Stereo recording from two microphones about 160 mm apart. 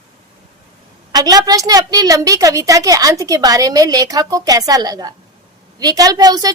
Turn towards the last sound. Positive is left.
turn(degrees=-25)  # may be behind; listen again after turning